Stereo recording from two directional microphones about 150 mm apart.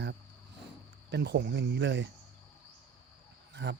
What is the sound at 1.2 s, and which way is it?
Speech, 90° right.